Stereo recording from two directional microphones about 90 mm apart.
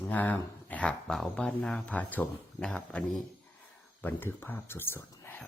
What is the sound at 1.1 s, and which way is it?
Speech, 5° left (ahead or behind).